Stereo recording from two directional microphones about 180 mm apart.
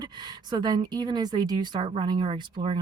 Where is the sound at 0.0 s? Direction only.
25° right (ahead or behind).